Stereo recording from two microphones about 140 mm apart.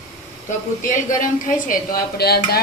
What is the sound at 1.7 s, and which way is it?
Speech, 90° left.